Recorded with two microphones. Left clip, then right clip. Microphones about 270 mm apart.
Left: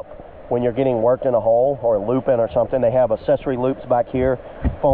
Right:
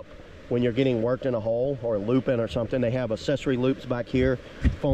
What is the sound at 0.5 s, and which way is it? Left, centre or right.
Speech, centre.